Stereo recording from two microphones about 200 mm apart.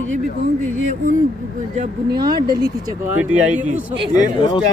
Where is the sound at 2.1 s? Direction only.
20° right (ahead or behind).